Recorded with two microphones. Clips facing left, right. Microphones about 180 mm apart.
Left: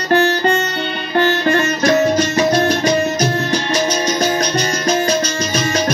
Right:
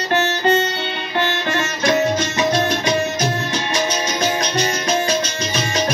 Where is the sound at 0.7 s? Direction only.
45° left (ahead or behind).